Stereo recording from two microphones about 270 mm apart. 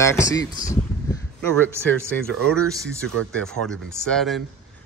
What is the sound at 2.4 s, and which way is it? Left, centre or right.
Speech, centre.